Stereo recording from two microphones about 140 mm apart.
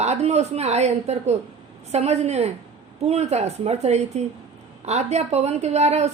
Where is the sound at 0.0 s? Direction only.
50° right (ahead or behind).